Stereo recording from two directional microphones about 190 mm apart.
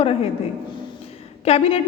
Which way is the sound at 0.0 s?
30° left (ahead or behind).